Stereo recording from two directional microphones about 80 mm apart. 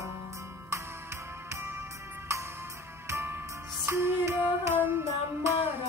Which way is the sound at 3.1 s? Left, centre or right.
Right.